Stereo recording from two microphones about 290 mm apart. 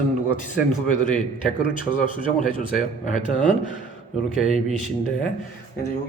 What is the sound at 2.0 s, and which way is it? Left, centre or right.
Speech, left.